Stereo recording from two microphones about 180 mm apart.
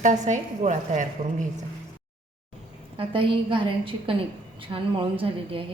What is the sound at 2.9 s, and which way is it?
A woman's voice, 30° right (ahead or behind).